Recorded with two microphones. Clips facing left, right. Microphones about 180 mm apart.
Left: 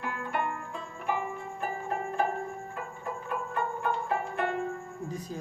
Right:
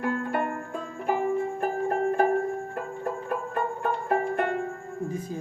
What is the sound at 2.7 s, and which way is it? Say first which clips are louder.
Music: right 6 dB; 50° right (ahead or behind).